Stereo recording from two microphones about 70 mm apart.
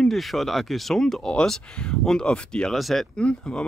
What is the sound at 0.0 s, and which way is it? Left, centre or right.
Speech, centre.